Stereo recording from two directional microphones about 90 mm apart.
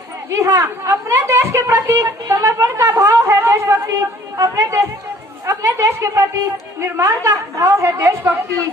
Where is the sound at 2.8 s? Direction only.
40° right (ahead or behind).